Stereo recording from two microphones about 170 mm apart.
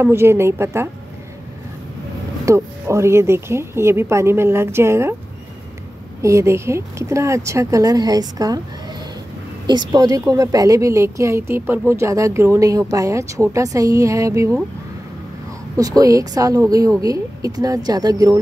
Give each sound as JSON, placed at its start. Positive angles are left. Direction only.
{"t": 0.0, "sound": "speech", "side_deg": -15}
{"t": 2.4, "sound": "speech", "side_deg": -15}
{"t": 6.2, "sound": "speech", "side_deg": -15}
{"t": 9.7, "sound": "speech", "side_deg": -25}
{"t": 16.0, "sound": "speech", "side_deg": -20}